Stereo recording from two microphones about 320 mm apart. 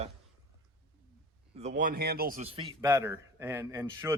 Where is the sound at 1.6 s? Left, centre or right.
Right.